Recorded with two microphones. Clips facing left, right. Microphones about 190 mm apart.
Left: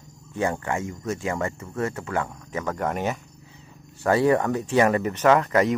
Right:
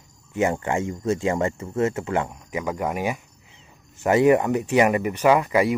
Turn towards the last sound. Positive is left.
turn(degrees=-10)  # may be behind; listen again after turning